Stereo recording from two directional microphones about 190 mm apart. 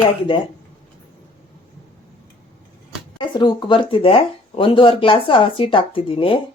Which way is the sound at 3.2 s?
25° left (ahead or behind).